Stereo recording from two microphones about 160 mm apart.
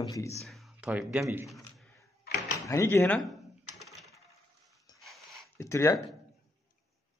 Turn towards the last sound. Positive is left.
turn(degrees=20)  # may be behind; listen again after turning